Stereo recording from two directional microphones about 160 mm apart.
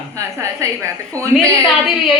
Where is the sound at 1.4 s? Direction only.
Centre (ahead or behind).